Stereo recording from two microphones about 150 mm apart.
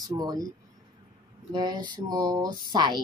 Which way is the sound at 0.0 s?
25° right (ahead or behind).